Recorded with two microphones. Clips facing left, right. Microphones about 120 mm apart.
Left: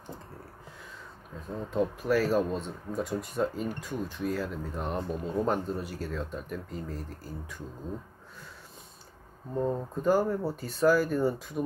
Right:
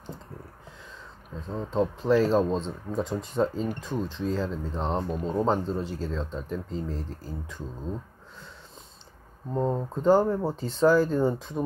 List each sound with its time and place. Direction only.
1.5 s speech: 25° right (ahead or behind)
9.5 s speech: 25° right (ahead or behind)